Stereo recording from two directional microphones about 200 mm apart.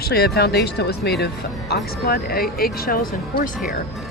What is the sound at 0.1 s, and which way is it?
Speech, 50° left (ahead or behind).